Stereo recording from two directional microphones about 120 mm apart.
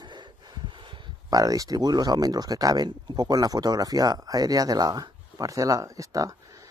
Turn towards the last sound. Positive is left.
turn(degrees=-30)  # may be behind; listen again after turning